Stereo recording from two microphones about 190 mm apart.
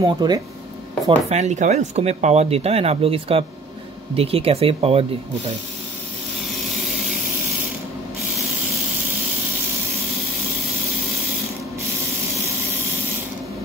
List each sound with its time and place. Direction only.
0.0 s speech: 20° right (ahead or behind)
1.3 s speech: 40° right (ahead or behind)
6.7 s a sound: centre (ahead or behind)